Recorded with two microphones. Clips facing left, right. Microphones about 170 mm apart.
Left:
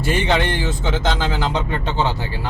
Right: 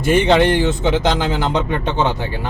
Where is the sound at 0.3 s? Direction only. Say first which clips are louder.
Right 6 dB; 15° right (ahead or behind).